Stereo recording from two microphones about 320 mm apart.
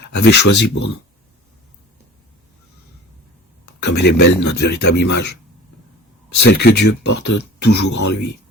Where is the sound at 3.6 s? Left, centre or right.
Left.